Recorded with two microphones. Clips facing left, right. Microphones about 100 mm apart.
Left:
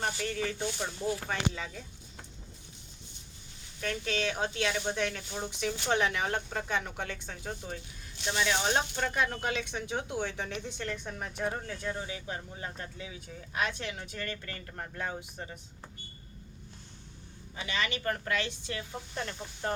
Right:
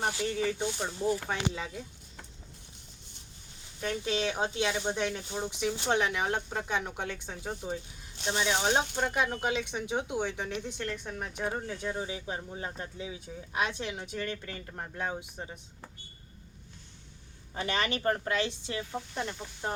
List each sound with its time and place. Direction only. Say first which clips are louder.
0.2 s speech: right 3 dB; 10° right (ahead or behind)
3.9 s speech: right 2 dB; 15° right (ahead or behind)
8.2 s speech: right 1 dB; 30° right (ahead or behind)
8.4 s speech: right 2 dB; 15° right (ahead or behind)
17.5 s speech: right 3 dB; 45° right (ahead or behind)
18.1 s speech: right 3 dB; 25° right (ahead or behind)
18.9 s speech: right 2 dB; 15° right (ahead or behind)